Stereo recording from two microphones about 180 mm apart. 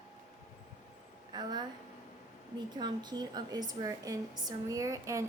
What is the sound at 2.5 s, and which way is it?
A woman's voice, 25° right (ahead or behind).